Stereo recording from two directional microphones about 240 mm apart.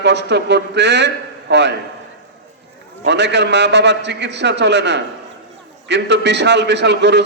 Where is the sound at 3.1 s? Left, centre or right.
Right.